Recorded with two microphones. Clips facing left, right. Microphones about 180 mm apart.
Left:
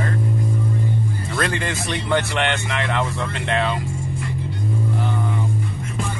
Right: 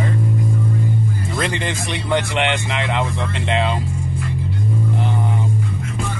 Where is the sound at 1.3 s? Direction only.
20° right (ahead or behind).